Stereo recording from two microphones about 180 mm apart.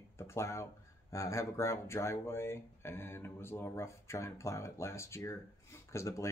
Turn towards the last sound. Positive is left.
turn(degrees=15)  # may be behind; listen again after turning